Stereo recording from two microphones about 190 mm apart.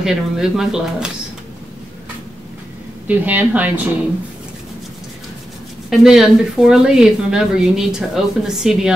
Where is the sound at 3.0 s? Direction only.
10° right (ahead or behind).